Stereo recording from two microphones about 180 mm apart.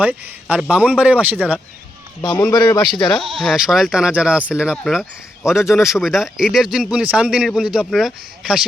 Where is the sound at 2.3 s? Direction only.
20° left (ahead or behind).